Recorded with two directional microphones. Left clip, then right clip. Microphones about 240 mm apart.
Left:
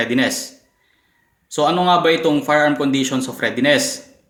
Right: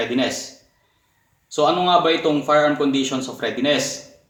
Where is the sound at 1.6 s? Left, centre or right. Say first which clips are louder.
Left 1 dB; left.